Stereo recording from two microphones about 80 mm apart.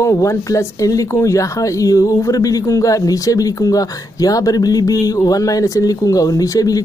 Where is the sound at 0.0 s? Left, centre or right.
Left.